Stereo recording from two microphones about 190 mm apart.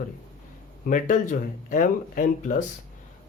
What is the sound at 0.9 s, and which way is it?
Speech, 40° left (ahead or behind).